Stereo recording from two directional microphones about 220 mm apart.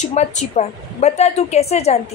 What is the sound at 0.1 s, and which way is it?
A woman's voice, 30° left (ahead or behind).